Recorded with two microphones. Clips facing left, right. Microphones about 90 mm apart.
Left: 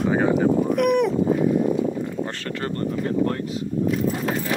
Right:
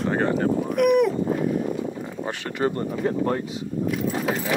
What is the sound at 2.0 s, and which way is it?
Speech, 15° right (ahead or behind).